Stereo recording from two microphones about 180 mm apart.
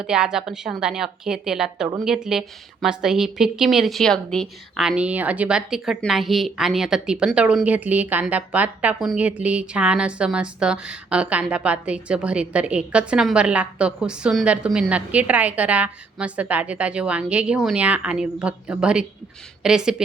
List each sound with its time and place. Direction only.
0.0 s speech: 5° right (ahead or behind)